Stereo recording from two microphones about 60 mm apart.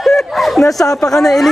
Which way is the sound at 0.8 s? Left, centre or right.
Left.